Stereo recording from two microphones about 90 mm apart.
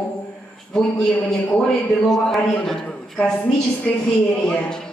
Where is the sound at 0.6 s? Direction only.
5° left (ahead or behind).